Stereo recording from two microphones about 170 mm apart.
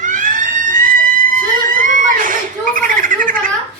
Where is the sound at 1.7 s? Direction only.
50° right (ahead or behind).